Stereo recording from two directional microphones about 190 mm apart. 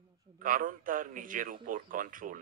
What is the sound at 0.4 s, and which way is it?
Speech, 45° right (ahead or behind).